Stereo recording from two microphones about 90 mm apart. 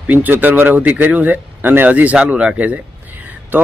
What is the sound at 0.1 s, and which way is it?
A man's voice, 20° right (ahead or behind).